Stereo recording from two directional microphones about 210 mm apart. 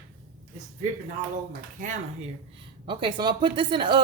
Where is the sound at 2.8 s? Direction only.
25° right (ahead or behind).